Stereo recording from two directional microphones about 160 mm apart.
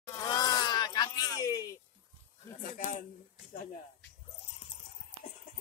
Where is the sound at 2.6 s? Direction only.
55° left (ahead or behind).